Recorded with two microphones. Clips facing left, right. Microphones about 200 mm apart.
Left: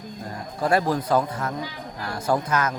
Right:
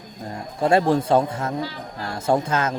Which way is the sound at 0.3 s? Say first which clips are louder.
Right 3 dB; 25° right (ahead or behind).